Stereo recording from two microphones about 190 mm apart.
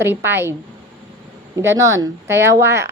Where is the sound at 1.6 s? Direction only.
15° right (ahead or behind).